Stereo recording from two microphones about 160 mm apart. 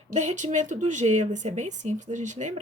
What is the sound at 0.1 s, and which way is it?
Speech, 45° right (ahead or behind).